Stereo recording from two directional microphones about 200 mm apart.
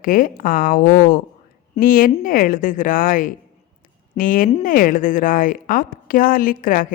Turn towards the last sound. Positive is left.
turn(degrees=45)  # may be behind; listen again after turning